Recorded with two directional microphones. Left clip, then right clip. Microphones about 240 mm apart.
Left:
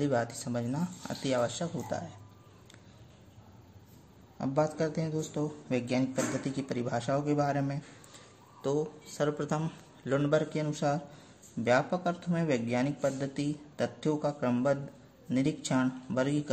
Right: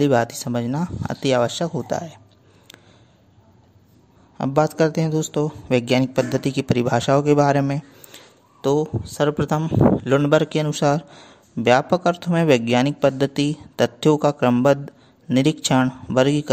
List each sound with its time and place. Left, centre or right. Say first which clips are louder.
0.0 s a man's voice: right 12 dB; right
4.4 s a man's voice: right 12 dB; right